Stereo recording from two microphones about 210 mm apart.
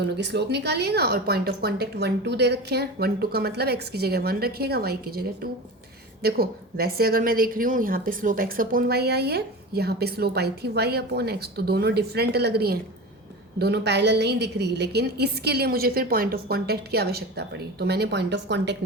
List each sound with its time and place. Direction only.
0.2 s a woman's voice: 55° right (ahead or behind)